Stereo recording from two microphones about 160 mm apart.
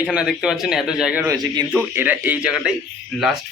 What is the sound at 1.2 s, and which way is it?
Speech, 25° right (ahead or behind).